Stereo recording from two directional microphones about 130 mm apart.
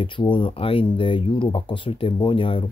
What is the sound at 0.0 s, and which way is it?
Speech, 40° left (ahead or behind).